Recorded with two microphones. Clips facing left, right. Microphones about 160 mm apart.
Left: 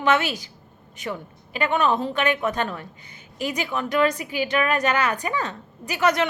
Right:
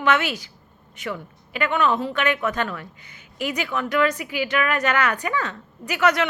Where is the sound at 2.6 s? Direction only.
25° left (ahead or behind).